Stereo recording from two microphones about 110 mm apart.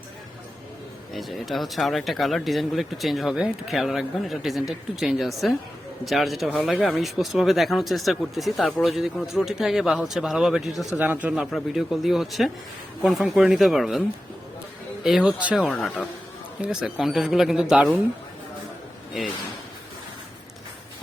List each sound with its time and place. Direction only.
1.1 s speech: centre (ahead or behind)
10.9 s speech: 15° right (ahead or behind)
11.3 s speech: 5° right (ahead or behind)
15.0 s speech: 5° right (ahead or behind)
16.6 s speech: 5° right (ahead or behind)
19.2 s speech: centre (ahead or behind)